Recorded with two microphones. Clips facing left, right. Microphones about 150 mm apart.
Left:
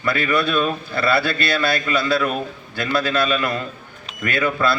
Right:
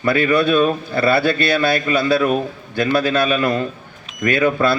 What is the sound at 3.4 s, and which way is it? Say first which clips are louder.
A man's voice: right 5 dB; 30° right (ahead or behind).